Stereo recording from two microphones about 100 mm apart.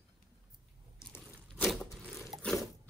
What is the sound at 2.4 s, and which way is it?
Crunch, centre (ahead or behind).